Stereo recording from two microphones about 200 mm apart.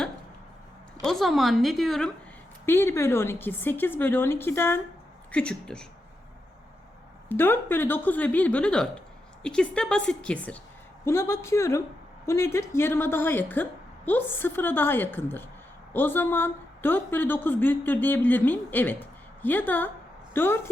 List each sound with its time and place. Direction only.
1.0 s a woman's voice: centre (ahead or behind)
2.6 s a woman's voice: 10° left (ahead or behind)
7.3 s a woman's voice: 10° left (ahead or behind)